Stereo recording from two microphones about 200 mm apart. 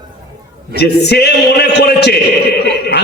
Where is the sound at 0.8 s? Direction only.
55° left (ahead or behind).